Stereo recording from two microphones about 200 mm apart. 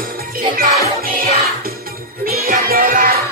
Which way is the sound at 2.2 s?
50° right (ahead or behind).